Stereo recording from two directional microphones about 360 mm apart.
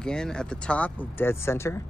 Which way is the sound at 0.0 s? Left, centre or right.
Centre.